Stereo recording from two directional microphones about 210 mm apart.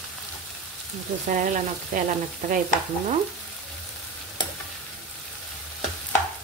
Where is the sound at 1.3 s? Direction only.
40° right (ahead or behind).